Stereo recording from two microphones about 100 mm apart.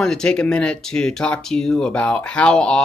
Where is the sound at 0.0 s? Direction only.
5° left (ahead or behind).